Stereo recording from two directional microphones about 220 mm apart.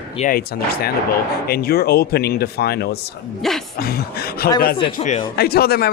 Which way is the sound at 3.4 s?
Centre (ahead or behind).